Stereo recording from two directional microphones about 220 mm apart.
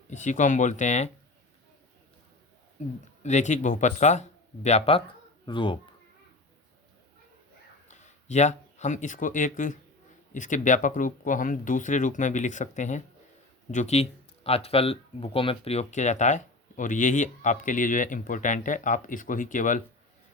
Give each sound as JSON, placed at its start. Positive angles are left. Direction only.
{"t": 0.1, "sound": "speech", "side_deg": 35}
{"t": 3.2, "sound": "speech", "side_deg": 30}
{"t": 7.9, "sound": "speech", "side_deg": 30}